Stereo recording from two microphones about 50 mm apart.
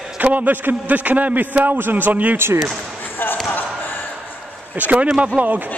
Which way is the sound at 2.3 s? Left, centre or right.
Right.